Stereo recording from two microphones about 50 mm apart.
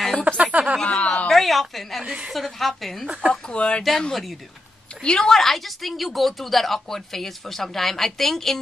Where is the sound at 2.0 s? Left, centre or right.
Centre.